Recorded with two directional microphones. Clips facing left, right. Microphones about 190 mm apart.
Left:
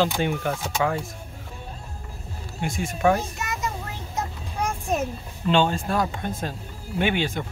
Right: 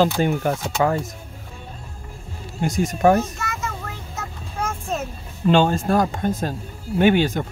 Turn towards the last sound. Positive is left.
turn(degrees=-45)  # may be behind; listen again after turning